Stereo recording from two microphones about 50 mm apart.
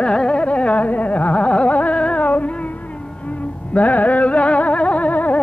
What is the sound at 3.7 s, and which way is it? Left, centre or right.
Music, left.